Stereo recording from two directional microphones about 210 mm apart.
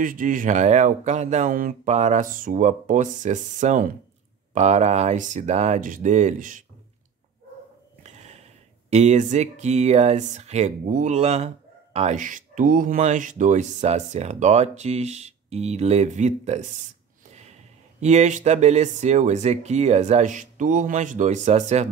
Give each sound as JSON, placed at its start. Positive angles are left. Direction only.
{"t": 0.0, "sound": "speech", "side_deg": -40}
{"t": 8.9, "sound": "speech", "side_deg": -35}
{"t": 18.0, "sound": "speech", "side_deg": -35}